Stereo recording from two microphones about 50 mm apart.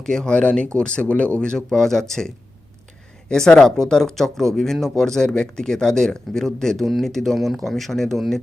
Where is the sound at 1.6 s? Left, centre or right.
Centre.